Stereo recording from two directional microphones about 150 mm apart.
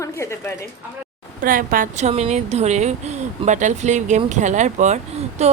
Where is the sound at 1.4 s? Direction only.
65° right (ahead or behind).